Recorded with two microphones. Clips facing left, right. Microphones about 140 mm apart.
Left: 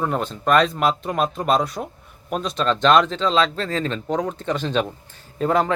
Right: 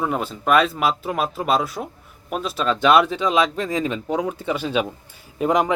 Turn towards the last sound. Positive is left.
turn(degrees=-15)  # may be behind; listen again after turning